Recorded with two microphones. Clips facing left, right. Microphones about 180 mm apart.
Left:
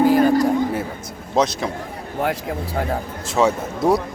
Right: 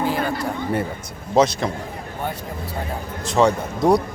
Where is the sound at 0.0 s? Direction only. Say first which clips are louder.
Left 9 dB; 40° left (ahead or behind).